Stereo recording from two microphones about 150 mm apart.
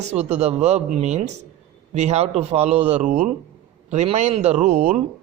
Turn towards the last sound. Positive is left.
turn(degrees=-45)  # may be behind; listen again after turning